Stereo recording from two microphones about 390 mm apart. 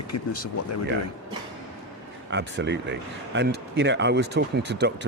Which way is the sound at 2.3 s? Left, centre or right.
Right.